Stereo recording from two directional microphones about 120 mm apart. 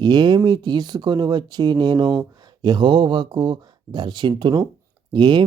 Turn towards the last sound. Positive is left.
turn(degrees=-40)  # may be behind; listen again after turning